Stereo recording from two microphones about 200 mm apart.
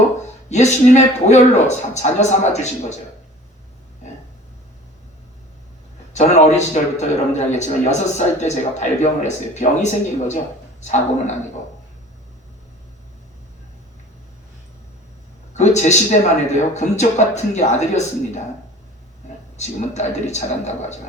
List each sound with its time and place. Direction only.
0.5 s a man's voice: 35° left (ahead or behind)
6.1 s a man's voice: 35° left (ahead or behind)
15.5 s a man's voice: 35° left (ahead or behind)
19.5 s a man's voice: 35° left (ahead or behind)